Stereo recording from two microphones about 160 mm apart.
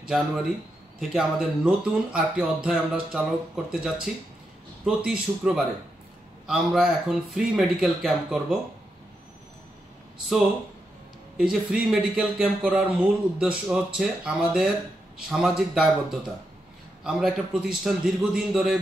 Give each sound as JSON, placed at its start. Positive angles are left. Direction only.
{"t": 0.9, "sound": "speech", "side_deg": -5}
{"t": 11.3, "sound": "speech", "side_deg": -5}